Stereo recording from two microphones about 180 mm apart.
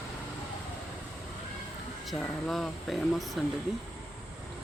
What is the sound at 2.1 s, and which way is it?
Speech, centre (ahead or behind).